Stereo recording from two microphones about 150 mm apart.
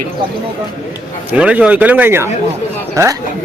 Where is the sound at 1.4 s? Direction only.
10° right (ahead or behind).